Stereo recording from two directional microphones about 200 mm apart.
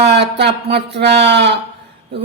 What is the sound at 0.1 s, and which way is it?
A man's voice, 55° right (ahead or behind).